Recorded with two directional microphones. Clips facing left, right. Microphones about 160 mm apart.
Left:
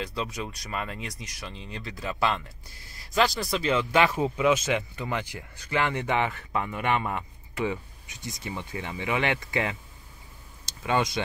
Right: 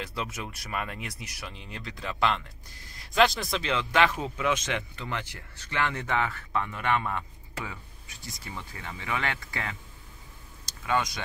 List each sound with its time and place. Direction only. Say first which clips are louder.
0.0 s speech: left 3 dB; 5° right (ahead or behind); by 11.2 s 25° left (ahead or behind)